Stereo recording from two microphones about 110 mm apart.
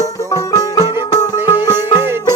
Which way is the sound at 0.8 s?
20° right (ahead or behind).